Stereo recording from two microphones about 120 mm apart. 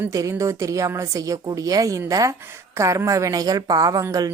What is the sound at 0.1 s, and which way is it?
A woman's voice, 25° right (ahead or behind).